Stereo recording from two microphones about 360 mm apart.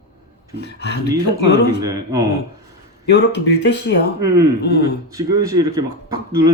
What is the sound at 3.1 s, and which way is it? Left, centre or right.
Speech, left.